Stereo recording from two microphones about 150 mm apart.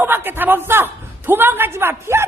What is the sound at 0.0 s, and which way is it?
A man's voice, 15° right (ahead or behind).